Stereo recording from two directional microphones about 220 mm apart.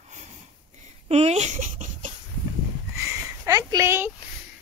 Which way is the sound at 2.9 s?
15° right (ahead or behind).